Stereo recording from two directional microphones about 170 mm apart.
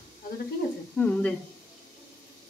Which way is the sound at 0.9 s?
10° left (ahead or behind).